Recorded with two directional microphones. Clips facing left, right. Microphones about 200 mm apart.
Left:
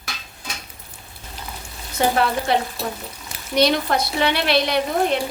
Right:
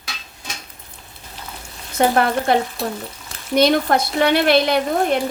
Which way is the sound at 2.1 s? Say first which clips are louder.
Right 3 dB; 50° right (ahead or behind).